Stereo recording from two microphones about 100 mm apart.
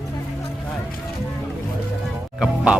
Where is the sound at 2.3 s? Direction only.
10° right (ahead or behind).